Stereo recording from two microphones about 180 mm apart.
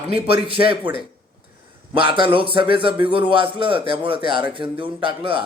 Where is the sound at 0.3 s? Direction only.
30° right (ahead or behind).